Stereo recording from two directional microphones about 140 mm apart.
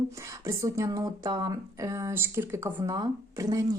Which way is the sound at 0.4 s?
20° right (ahead or behind).